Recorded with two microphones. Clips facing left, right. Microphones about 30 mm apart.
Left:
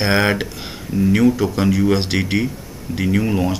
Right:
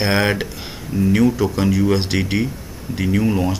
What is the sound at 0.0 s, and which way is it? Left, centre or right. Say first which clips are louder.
Speech: left 1 dB; centre.